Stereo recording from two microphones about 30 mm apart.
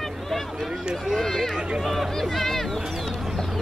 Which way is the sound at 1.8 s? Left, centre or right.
Centre.